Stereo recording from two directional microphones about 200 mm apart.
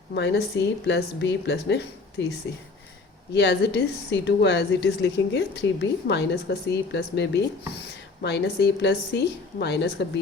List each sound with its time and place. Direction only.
0.1 s a woman's voice: 55° left (ahead or behind)
3.3 s a woman's voice: 60° left (ahead or behind)